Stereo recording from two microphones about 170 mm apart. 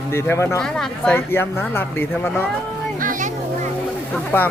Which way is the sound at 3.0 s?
50° right (ahead or behind).